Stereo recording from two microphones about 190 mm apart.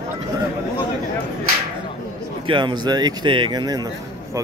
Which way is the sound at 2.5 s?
25° right (ahead or behind).